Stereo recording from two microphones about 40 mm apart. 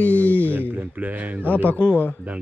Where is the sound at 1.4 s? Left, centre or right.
Left.